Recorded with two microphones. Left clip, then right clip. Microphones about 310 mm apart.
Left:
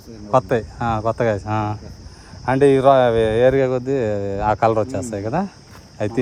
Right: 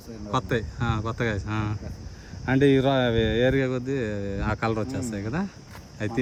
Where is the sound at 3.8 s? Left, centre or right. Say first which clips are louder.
Left 9 dB; left.